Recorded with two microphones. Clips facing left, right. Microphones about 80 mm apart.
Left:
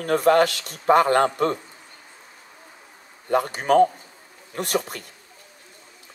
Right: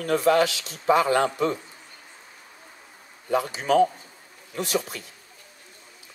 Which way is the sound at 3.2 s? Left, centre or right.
Left.